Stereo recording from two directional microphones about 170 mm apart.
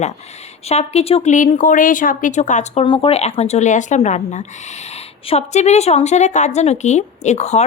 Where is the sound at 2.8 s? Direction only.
30° left (ahead or behind).